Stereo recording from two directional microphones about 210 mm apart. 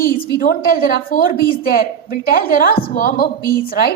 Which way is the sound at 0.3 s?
45° left (ahead or behind).